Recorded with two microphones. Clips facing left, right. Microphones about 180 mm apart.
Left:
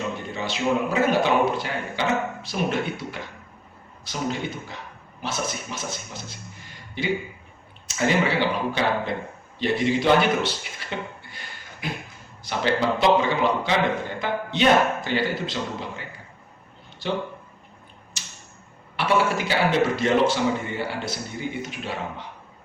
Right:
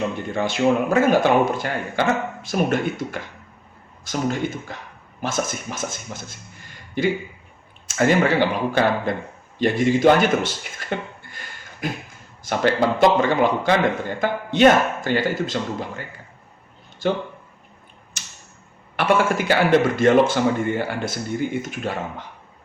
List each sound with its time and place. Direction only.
0.3 s a man's voice: 50° right (ahead or behind)
17.0 s a man's voice: 45° right (ahead or behind)
18.9 s a man's voice: 50° right (ahead or behind)